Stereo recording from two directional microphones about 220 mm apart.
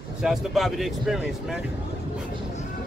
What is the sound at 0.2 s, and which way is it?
Speech, centre (ahead or behind).